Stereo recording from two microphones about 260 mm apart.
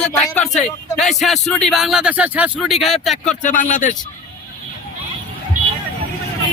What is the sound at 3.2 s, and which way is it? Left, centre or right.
Speech, left.